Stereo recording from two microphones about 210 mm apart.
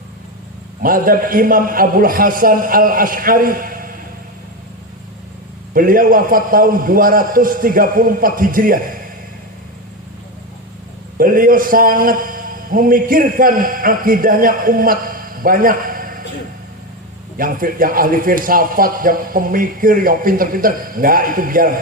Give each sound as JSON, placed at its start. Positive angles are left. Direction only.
{"t": 0.8, "sound": "a man's voice", "side_deg": -40}
{"t": 5.7, "sound": "a man's voice", "side_deg": -40}
{"t": 11.2, "sound": "a man's voice", "side_deg": -40}
{"t": 17.3, "sound": "a man's voice", "side_deg": -40}